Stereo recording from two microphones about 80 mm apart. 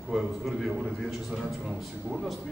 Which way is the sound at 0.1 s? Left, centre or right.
Centre.